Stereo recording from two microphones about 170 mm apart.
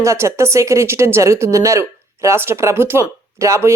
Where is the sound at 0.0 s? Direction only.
15° right (ahead or behind).